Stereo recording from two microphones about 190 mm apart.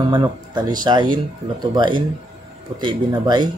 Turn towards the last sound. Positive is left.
turn(degrees=-20)  # may be behind; listen again after turning